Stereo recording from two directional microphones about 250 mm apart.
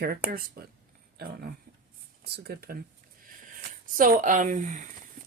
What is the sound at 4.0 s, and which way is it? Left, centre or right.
Speech, right.